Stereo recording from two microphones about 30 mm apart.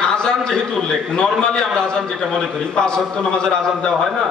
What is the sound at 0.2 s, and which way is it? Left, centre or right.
A man's voice, left.